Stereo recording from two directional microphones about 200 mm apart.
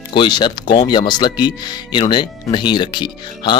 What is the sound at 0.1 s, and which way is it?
Speech, 25° left (ahead or behind).